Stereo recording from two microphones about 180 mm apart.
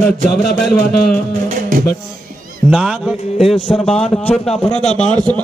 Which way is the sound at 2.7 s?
5° right (ahead or behind).